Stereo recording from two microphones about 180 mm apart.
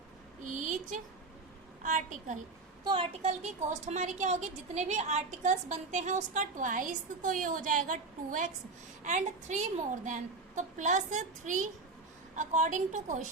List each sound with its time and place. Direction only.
0.5 s a sound: 45° right (ahead or behind)
1.8 s a woman's voice: 45° right (ahead or behind)
2.8 s a woman's voice: 30° right (ahead or behind)